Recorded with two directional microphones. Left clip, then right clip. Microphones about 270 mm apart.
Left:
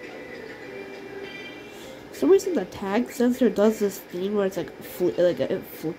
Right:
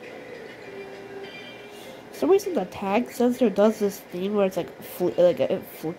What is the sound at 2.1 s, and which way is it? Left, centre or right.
Speech, centre.